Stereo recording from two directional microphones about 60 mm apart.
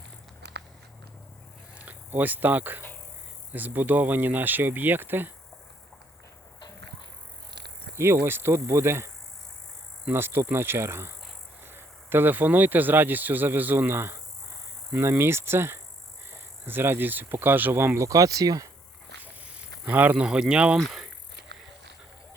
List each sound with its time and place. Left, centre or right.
1.7 s speech: right
7.9 s speech: right
10.1 s speech: right
15.2 s speech: right
18.0 s speech: right
19.2 s insect: right
20.1 s speech: centre
20.7 s bicycle: centre